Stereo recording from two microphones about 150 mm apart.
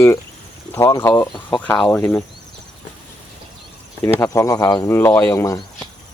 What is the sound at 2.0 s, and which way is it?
Speech, 15° left (ahead or behind).